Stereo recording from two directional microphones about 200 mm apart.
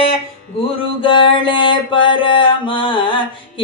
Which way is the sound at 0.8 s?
25° left (ahead or behind).